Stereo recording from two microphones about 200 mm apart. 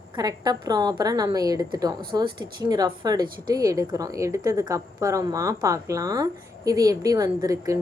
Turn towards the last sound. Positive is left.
turn(degrees=-15)  # may be behind; listen again after turning